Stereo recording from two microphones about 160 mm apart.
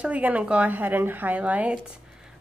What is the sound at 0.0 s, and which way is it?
Speech, 10° right (ahead or behind).